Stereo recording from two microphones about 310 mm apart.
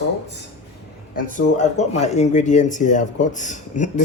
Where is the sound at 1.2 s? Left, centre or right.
Left.